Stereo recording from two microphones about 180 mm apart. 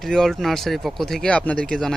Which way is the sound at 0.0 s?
Centre (ahead or behind).